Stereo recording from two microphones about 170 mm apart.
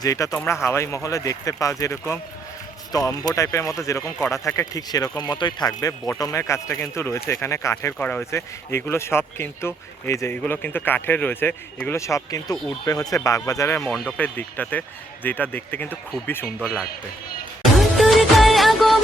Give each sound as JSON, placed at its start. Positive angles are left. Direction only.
{"t": 0.0, "sound": "speech", "side_deg": 20}
{"t": 13.9, "sound": "speech", "side_deg": 0}
{"t": 14.2, "sound": "speech", "side_deg": 10}
{"t": 16.6, "sound": "speech", "side_deg": -5}
{"t": 17.7, "sound": "music", "side_deg": 0}